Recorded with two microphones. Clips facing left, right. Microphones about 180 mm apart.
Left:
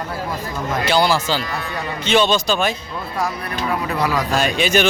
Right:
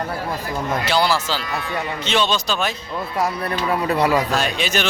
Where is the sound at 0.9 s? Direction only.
Centre (ahead or behind).